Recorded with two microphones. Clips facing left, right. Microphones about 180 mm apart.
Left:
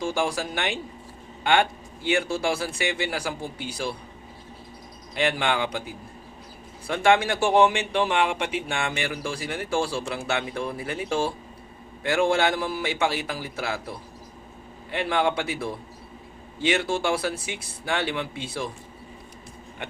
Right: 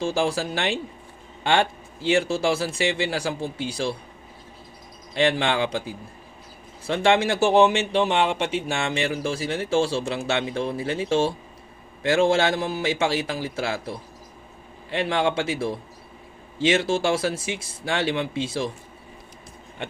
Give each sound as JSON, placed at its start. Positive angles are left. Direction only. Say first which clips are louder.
{"t": 0.0, "sound": "speech", "louder": "right 3 dB", "side_deg": -25}
{"t": 2.0, "sound": "speech", "louder": "right 3 dB", "side_deg": -25}
{"t": 5.1, "sound": "speech", "louder": "right 3 dB", "side_deg": -25}
{"t": 6.8, "sound": "speech", "louder": "right 1 dB", "side_deg": -25}